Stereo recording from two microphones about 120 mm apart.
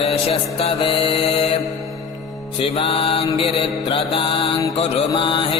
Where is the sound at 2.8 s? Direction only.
45° left (ahead or behind).